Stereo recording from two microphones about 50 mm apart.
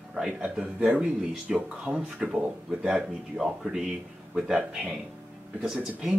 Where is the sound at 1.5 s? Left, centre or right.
Centre.